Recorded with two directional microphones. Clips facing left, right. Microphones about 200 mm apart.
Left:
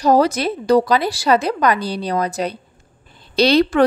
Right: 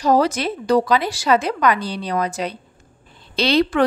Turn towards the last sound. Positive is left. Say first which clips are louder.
# left 3 dB
turn(degrees=40)  # may be behind; listen again after turning